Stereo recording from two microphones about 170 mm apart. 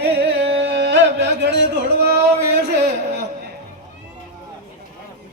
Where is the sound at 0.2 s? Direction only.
85° right.